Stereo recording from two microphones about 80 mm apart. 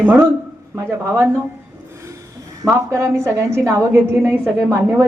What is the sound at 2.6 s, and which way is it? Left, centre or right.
A woman's voice, right.